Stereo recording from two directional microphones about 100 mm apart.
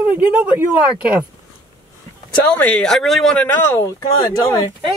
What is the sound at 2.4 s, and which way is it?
Speech, 15° left (ahead or behind).